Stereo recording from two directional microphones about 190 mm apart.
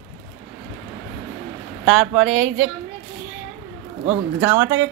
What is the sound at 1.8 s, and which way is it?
Speech, 5° right (ahead or behind).